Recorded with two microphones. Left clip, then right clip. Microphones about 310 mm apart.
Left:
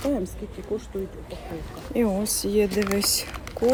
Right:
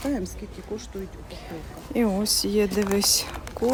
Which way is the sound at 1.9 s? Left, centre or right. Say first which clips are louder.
Right 1 dB; centre.